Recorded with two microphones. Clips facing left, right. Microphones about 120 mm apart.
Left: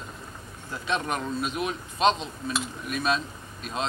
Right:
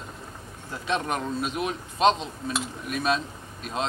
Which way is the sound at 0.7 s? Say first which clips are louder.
Right 1 dB; 40° right (ahead or behind).